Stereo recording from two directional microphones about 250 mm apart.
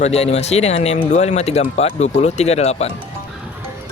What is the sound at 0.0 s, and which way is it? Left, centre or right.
Speech, left.